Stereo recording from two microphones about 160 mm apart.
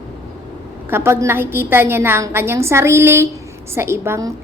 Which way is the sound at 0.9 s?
15° right (ahead or behind).